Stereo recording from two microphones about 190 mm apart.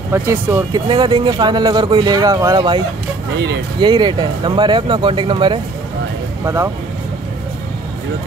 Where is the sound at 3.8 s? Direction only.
25° right (ahead or behind).